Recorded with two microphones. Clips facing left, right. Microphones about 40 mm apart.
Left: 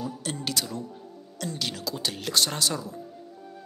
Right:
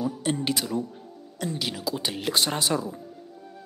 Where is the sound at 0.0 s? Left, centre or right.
Centre.